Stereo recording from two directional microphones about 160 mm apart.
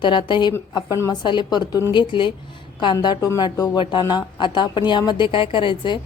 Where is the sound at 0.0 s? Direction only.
30° left (ahead or behind).